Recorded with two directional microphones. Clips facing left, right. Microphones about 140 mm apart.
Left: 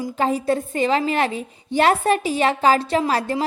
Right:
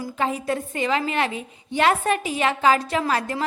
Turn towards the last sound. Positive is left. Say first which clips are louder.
# left 3 dB
turn(degrees=30)  # may be behind; listen again after turning